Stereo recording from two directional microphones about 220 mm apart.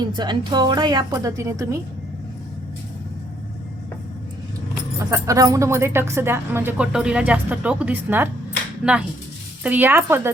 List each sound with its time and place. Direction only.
0.0 s a woman's voice: 20° right (ahead or behind)
4.9 s speech: 15° right (ahead or behind)